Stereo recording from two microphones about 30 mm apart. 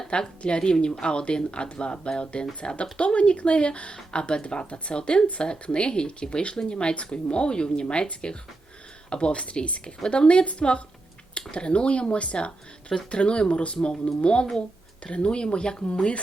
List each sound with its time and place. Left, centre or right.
0.1 s a woman's voice: left